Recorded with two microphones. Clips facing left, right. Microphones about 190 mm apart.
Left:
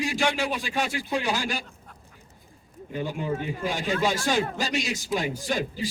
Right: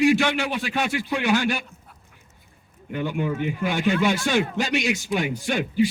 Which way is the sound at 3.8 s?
35° left (ahead or behind).